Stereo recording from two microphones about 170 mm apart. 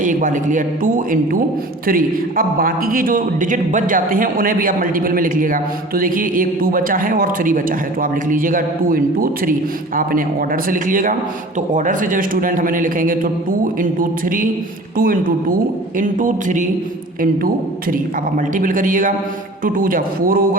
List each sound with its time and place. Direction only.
0.0 s a man's voice: 50° right (ahead or behind)